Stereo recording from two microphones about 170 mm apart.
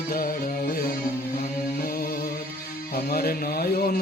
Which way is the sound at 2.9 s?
65° left (ahead or behind).